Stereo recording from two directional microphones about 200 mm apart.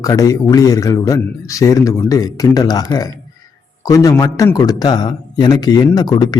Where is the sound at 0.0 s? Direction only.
15° left (ahead or behind).